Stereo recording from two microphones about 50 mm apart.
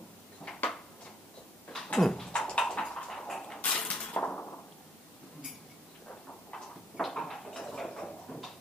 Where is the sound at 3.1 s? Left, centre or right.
Centre.